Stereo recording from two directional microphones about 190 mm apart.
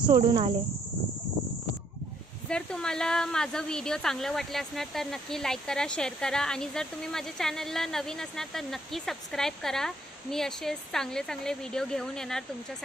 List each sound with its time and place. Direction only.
0.0 s speech: 25° right (ahead or behind)
2.5 s speech: 5° left (ahead or behind)